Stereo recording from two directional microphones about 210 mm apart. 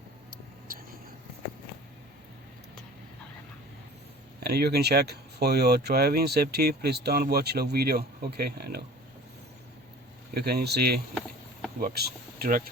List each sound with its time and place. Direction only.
4.4 s speech: 50° right (ahead or behind)
10.3 s speech: 50° right (ahead or behind)